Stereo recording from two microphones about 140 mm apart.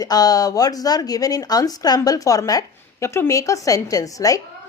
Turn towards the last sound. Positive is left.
turn(degrees=25)  # may be behind; listen again after turning